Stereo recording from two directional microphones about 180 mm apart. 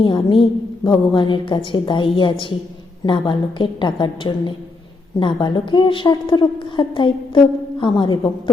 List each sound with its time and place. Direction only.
0.0 s a woman's voice: 25° left (ahead or behind)